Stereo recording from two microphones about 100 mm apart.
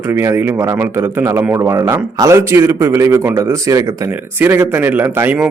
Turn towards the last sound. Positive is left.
turn(degrees=-20)  # may be behind; listen again after turning